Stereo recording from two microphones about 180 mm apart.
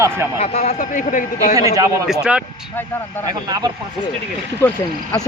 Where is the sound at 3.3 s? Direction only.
20° right (ahead or behind).